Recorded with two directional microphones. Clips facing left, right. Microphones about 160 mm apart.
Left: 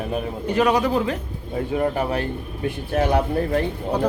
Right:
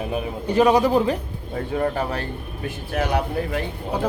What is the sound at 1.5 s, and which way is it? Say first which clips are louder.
A man's voice: left 1 dB; 20° left (ahead or behind).